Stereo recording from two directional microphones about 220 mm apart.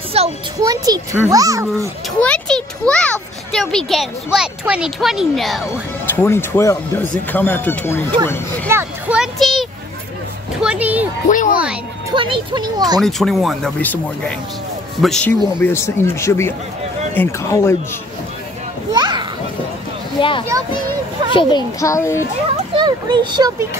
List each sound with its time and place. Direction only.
0.2 s a child's voice: 25° right (ahead or behind)
0.6 s speech: 15° right (ahead or behind)
2.1 s a child's voice: 5° left (ahead or behind)
8.6 s a child's voice: 10° right (ahead or behind)
11.2 s speech: 35° left (ahead or behind)
12.1 s speech: 20° right (ahead or behind)
13.0 s a child's voice: centre (ahead or behind)
18.9 s children playing: 20° right (ahead or behind)
20.2 s speech: 20° left (ahead or behind)
22.8 s speech: 20° right (ahead or behind)